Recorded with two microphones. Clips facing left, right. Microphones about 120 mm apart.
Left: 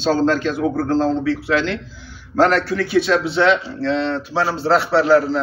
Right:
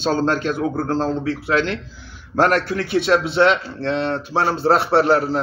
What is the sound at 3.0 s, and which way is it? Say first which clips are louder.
A man's voice: right 4 dB; 55° right (ahead or behind).